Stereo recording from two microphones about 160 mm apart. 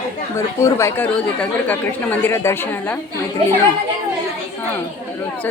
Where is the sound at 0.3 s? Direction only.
20° left (ahead or behind).